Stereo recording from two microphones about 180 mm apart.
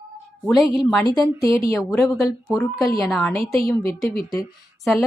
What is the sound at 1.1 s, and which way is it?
A woman's voice, 20° left (ahead or behind).